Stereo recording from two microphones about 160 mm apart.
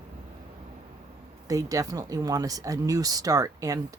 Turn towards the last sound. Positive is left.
turn(degrees=-20)  # may be behind; listen again after turning